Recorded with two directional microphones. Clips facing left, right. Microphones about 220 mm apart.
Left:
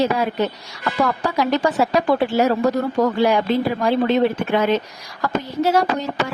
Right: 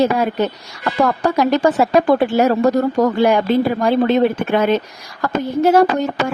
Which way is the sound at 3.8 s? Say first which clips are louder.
Right 3 dB; 45° right (ahead or behind).